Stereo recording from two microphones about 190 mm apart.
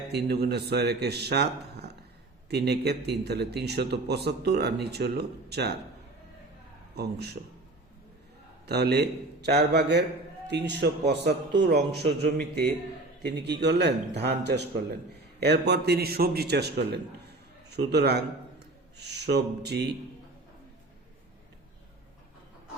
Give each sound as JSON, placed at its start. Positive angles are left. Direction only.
{"t": 0.1, "sound": "a man's voice", "side_deg": -60}
{"t": 2.5, "sound": "a man's voice", "side_deg": -60}
{"t": 6.9, "sound": "a man's voice", "side_deg": -60}
{"t": 8.6, "sound": "a man's voice", "side_deg": -60}